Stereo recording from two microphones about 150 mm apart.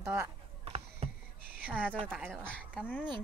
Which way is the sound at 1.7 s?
10° right (ahead or behind).